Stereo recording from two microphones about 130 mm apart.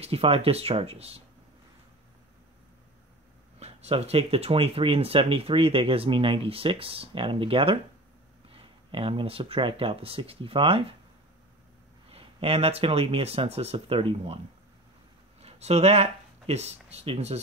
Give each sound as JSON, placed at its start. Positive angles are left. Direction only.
{"t": 0.0, "sound": "speech", "side_deg": -50}
{"t": 3.5, "sound": "speech", "side_deg": -50}
{"t": 12.1, "sound": "speech", "side_deg": -50}
{"t": 15.4, "sound": "speech", "side_deg": -55}